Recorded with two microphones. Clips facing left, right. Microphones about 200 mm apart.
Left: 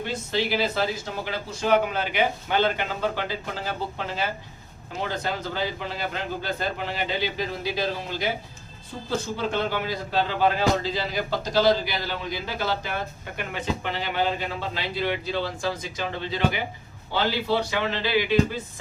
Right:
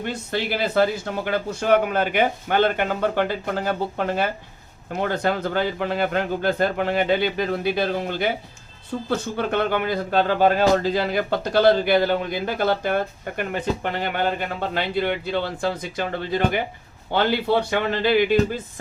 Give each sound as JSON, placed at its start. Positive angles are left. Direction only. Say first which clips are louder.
{"t": 0.0, "sound": "a man's voice", "louder": "right 1 dB", "side_deg": -55}